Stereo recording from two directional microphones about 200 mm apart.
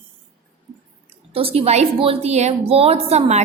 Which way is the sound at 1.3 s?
30° right (ahead or behind).